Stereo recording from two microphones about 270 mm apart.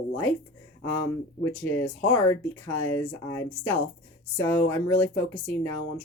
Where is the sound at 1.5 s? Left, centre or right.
Centre.